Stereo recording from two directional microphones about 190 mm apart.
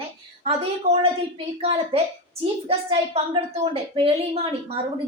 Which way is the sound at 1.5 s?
30° right (ahead or behind).